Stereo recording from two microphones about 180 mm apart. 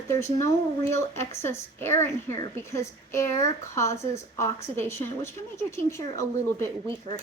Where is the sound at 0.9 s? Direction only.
15° left (ahead or behind).